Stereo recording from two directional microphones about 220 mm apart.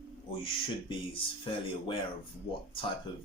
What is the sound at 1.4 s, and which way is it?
Speech, 25° left (ahead or behind).